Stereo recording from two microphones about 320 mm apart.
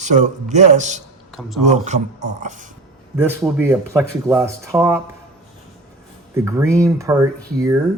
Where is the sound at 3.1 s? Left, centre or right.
Centre.